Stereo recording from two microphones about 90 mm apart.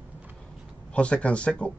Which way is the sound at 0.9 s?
10° left (ahead or behind).